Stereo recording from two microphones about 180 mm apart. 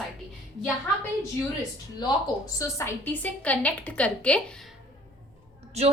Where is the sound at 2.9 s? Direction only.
10° left (ahead or behind).